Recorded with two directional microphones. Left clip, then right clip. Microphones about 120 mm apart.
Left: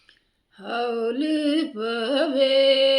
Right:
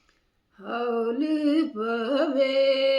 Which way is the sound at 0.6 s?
15° left (ahead or behind).